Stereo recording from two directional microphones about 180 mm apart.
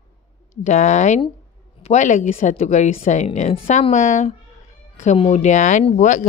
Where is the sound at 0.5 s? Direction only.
40° left (ahead or behind).